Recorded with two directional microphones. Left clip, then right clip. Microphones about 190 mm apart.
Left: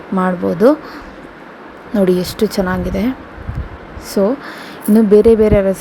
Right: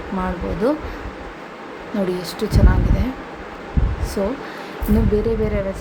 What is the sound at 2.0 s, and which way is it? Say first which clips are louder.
Speech: left 11 dB; 35° left (ahead or behind).